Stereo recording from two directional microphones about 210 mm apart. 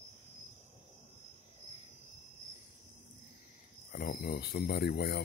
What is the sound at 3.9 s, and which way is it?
Speech, 45° left (ahead or behind).